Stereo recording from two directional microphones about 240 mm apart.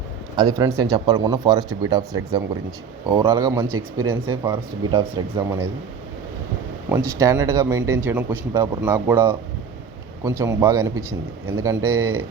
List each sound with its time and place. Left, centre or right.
0.3 s speech: centre
6.9 s speech: centre
11.8 s speech: right